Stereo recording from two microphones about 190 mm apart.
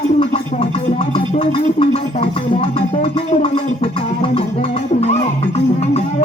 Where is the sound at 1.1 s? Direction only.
30° left (ahead or behind).